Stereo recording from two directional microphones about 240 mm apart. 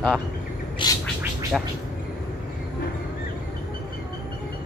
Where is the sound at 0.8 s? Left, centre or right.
Centre.